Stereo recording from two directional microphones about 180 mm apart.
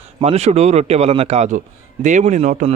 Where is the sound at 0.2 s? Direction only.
35° right (ahead or behind).